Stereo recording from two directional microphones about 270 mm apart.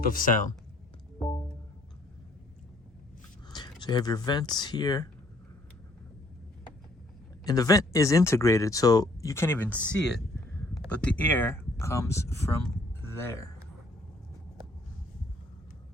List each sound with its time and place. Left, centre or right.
0.0 s speech: left
3.5 s speech: centre
7.4 s speech: centre
13.1 s music: centre